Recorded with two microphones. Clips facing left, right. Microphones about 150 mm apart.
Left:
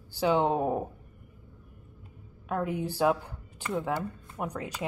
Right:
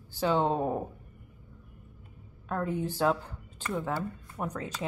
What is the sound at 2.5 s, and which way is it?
A woman's voice, 10° left (ahead or behind).